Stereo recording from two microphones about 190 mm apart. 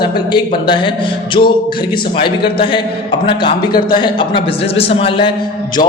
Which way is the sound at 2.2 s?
25° left (ahead or behind).